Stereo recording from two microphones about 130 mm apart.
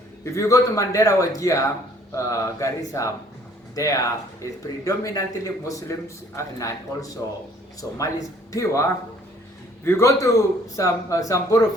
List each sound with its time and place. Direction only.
0.3 s a man's voice: 25° left (ahead or behind)